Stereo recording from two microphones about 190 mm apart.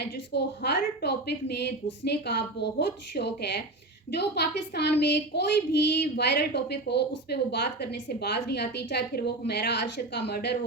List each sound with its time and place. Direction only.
0.0 s speech: 60° left (ahead or behind)